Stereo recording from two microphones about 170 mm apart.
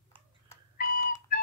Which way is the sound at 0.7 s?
55° left (ahead or behind).